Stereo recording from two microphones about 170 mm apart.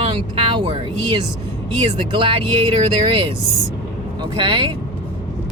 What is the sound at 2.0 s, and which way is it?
Speech, 30° right (ahead or behind).